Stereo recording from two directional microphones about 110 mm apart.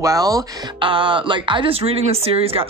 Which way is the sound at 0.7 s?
50° right (ahead or behind).